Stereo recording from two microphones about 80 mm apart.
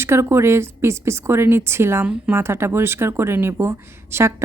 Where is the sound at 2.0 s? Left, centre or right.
Right.